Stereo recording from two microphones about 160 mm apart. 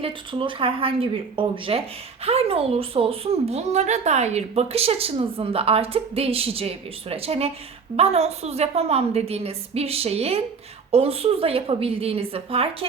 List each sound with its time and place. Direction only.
0.0 s speech: 30° right (ahead or behind)